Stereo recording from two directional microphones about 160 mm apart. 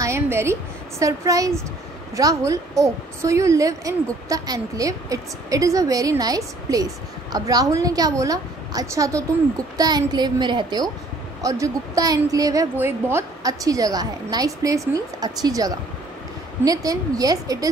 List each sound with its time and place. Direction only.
0.0 s a woman's voice: 15° right (ahead or behind)